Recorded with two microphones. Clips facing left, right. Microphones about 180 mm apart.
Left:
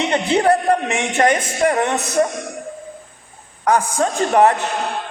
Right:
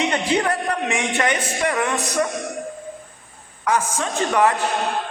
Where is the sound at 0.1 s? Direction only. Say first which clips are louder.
Left 5 dB; 30° left (ahead or behind).